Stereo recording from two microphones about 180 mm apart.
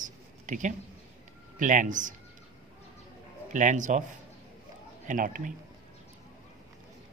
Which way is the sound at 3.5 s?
45° right (ahead or behind).